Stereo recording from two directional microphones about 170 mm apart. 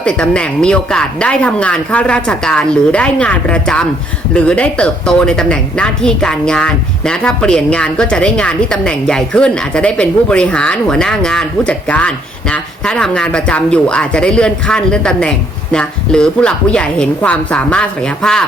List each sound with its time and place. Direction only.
0.0 s a woman's voice: 5° left (ahead or behind)